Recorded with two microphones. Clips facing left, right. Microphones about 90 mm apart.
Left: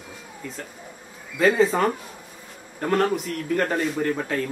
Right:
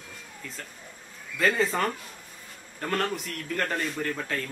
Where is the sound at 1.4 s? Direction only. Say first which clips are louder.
Left 6 dB; 5° left (ahead or behind).